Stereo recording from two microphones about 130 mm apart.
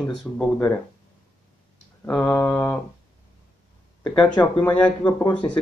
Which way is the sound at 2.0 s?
10° left (ahead or behind).